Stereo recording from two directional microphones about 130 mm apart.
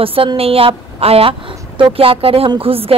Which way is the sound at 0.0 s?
45° right (ahead or behind).